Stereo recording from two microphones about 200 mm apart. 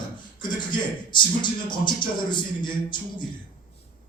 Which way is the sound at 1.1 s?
25° left (ahead or behind).